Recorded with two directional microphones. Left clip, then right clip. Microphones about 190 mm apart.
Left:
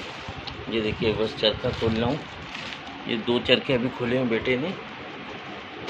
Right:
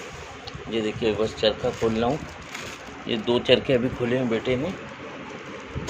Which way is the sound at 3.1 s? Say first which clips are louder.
Right 2 dB; 20° right (ahead or behind).